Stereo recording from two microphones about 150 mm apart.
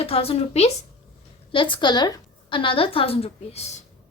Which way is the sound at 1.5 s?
35° left (ahead or behind).